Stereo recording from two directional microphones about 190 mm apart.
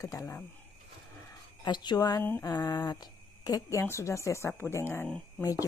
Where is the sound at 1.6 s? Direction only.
25° left (ahead or behind).